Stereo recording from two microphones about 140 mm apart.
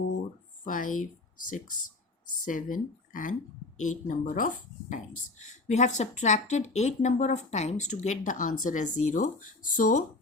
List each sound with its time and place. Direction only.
0.6 s a woman's voice: 75° left (ahead or behind)
5.5 s a woman's voice: 55° left (ahead or behind)